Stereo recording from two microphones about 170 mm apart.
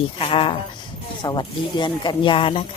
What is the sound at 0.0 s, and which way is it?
Speech, 35° left (ahead or behind).